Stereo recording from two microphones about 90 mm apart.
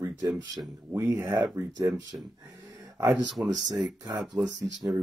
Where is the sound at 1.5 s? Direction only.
40° right (ahead or behind).